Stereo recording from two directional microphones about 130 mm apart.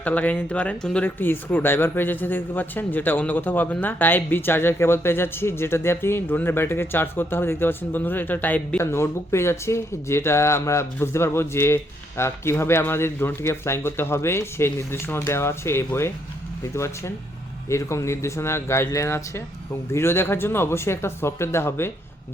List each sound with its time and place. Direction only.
0.0 s speech: 10° left (ahead or behind)